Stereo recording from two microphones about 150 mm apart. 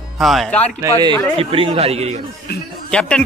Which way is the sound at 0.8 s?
25° right (ahead or behind).